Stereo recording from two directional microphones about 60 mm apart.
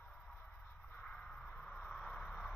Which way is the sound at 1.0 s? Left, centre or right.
Centre.